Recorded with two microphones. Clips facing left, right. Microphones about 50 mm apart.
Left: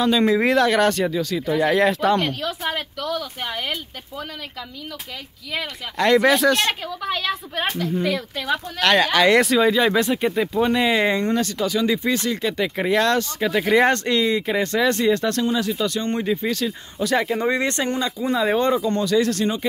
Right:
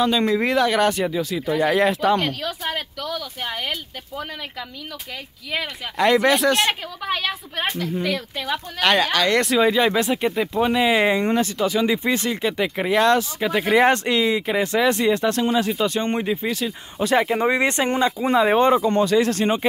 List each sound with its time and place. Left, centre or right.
0.0 s speech: centre
5.5 s speech: centre
7.5 s speech: centre; by 16.3 s right
16.3 s speech: centre; by 19.6 s right